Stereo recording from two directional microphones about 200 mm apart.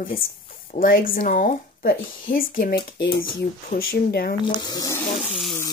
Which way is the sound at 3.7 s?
50° left (ahead or behind).